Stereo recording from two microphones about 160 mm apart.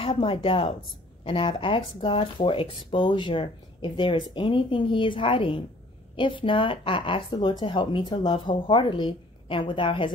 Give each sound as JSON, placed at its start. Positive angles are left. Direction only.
{"t": 0.0, "sound": "speech", "side_deg": 35}